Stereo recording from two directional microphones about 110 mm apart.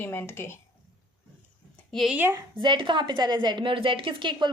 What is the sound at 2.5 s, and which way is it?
A woman's voice, 50° right (ahead or behind).